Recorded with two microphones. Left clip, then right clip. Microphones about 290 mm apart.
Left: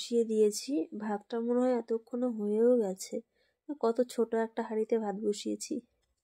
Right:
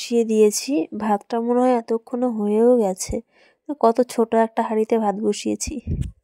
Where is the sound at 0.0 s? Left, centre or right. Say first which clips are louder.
Right 10 dB; right.